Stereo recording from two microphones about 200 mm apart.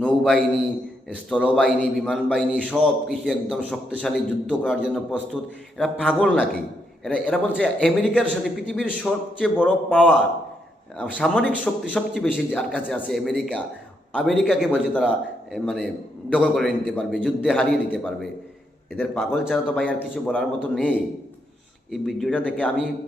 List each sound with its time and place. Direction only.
0.0 s a man's voice: 5° left (ahead or behind)
21.9 s a man's voice: centre (ahead or behind)